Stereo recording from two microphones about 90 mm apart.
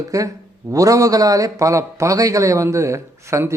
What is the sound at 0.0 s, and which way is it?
Speech, 40° right (ahead or behind).